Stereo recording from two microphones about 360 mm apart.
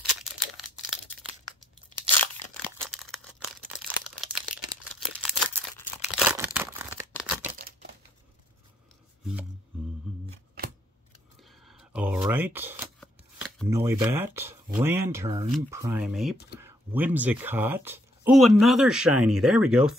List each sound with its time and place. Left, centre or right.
0.2 s crumpling: centre
1.6 s tearing: centre
5.2 s crumpling: centre
6.1 s a sound: centre
7.2 s a sound: centre
7.5 s crumpling: right
11.6 s speech: centre